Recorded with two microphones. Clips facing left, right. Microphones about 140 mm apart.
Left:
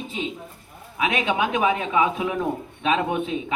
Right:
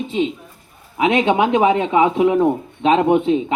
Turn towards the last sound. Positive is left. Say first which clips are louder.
# right 9 dB
turn(degrees=-25)  # may be behind; listen again after turning